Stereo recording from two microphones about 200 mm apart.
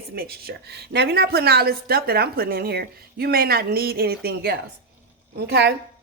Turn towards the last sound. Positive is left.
turn(degrees=-55)  # may be behind; listen again after turning